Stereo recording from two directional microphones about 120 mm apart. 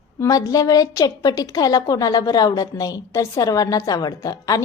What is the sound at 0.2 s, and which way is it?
A woman's voice, 30° left (ahead or behind).